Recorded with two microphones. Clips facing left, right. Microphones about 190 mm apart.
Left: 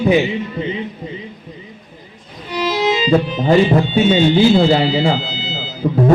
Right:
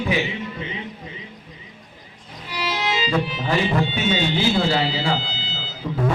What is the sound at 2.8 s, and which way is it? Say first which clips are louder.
A man's voice: left 8 dB; 35° left (ahead or behind).